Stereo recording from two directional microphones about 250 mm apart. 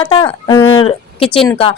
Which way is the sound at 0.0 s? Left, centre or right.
Left.